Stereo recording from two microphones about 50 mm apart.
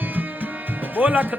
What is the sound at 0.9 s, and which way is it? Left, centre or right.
Music, right.